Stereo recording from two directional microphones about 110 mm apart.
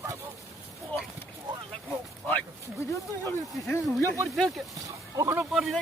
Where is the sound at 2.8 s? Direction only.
25° left (ahead or behind).